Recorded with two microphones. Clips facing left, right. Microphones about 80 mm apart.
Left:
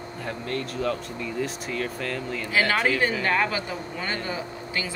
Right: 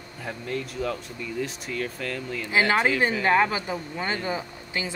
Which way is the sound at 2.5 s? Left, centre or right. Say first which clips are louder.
Right 1 dB; right.